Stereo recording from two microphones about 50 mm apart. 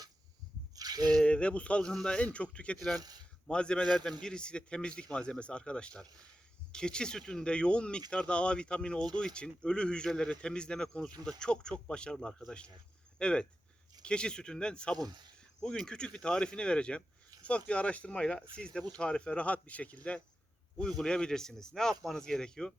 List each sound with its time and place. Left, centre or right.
1.2 s speech: left
1.8 s speech: centre
2.2 s speech: left
21.0 s speech: centre